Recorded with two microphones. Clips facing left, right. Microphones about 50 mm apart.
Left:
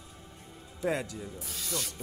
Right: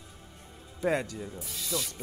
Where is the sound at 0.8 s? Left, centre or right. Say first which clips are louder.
Right 3 dB; centre.